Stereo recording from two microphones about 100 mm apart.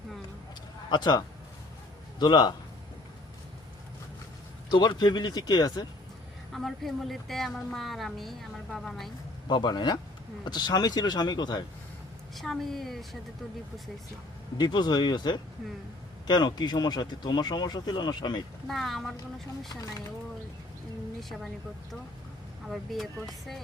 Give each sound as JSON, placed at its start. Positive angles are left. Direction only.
{"t": 0.9, "sound": "speech", "side_deg": 45}
{"t": 4.7, "sound": "speech", "side_deg": 45}
{"t": 6.5, "sound": "a woman's voice", "side_deg": 0}
{"t": 9.5, "sound": "speech", "side_deg": 45}
{"t": 12.4, "sound": "a woman's voice", "side_deg": 0}
{"t": 14.6, "sound": "speech", "side_deg": 45}
{"t": 18.7, "sound": "a woman's voice", "side_deg": 0}
{"t": 19.6, "sound": "speech", "side_deg": 35}
{"t": 21.2, "sound": "a woman's voice", "side_deg": 0}
{"t": 22.7, "sound": "a woman's voice", "side_deg": 0}